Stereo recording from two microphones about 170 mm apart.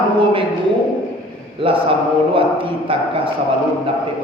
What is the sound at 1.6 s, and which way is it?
Speech, 30° right (ahead or behind).